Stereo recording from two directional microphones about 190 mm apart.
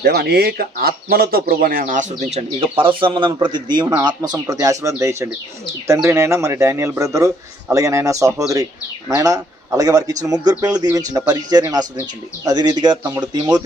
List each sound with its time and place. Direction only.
0.0 s speech: 60° right (ahead or behind); by 13.7 s 20° right (ahead or behind)